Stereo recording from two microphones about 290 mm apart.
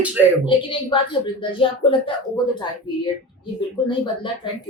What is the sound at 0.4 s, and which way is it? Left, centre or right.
Speech, centre.